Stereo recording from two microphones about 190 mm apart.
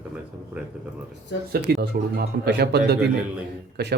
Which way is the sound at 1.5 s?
55° right (ahead or behind).